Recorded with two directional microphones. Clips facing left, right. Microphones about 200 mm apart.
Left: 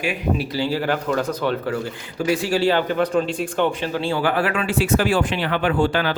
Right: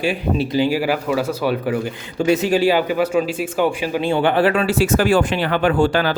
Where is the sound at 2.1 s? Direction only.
25° right (ahead or behind).